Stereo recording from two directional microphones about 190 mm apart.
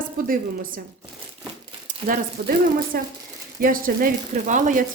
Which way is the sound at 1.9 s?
40° right (ahead or behind).